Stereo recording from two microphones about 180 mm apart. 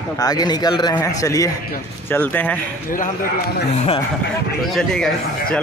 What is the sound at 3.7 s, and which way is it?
Speech, 35° left (ahead or behind).